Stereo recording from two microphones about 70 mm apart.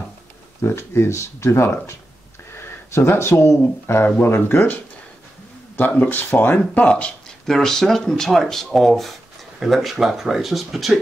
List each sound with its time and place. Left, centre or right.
0.6 s speech: left
5.8 s speech: left
7.4 s speech: centre